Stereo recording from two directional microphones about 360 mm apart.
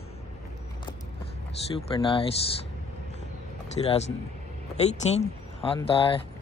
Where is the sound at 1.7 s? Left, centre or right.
Centre.